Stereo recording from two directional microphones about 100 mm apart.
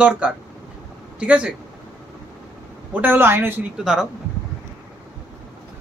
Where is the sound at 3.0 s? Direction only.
20° right (ahead or behind).